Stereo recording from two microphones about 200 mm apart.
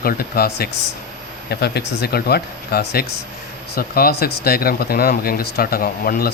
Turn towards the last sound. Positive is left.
turn(degrees=45)  # may be behind; listen again after turning